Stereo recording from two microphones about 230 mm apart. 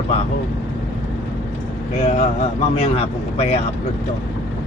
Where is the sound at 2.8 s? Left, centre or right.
Left.